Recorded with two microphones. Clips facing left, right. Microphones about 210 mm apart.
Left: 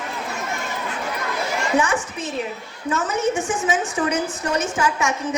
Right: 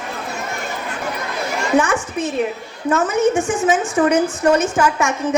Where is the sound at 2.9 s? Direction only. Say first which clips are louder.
Right 6 dB; 50° right (ahead or behind).